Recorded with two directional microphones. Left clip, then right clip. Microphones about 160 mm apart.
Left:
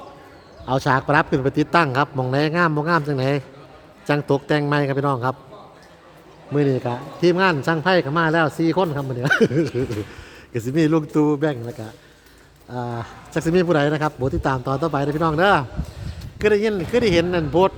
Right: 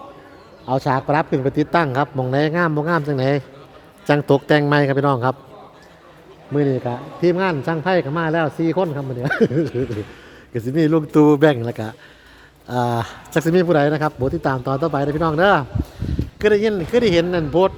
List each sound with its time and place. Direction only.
0.7 s a man's voice: 5° right (ahead or behind); by 5.4 s 25° right (ahead or behind)
6.5 s a man's voice: 10° right (ahead or behind)
11.1 s speech: 35° right (ahead or behind)
13.4 s a man's voice: 20° right (ahead or behind)